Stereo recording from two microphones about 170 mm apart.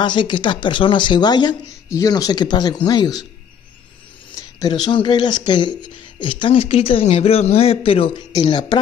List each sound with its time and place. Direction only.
0.0 s speech: 30° left (ahead or behind)
4.6 s speech: 25° left (ahead or behind)